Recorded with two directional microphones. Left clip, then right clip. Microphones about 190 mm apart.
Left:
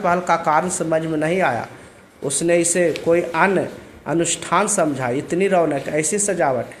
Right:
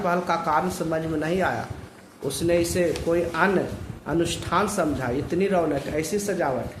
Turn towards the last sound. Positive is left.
turn(degrees=30)  # may be behind; listen again after turning